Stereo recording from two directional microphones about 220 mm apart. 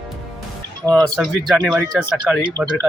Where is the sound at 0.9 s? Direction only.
Centre (ahead or behind).